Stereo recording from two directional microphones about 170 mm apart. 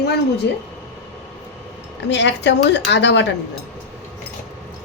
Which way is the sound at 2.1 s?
90° left.